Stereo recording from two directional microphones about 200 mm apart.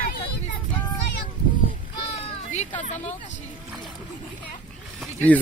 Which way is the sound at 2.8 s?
35° left (ahead or behind).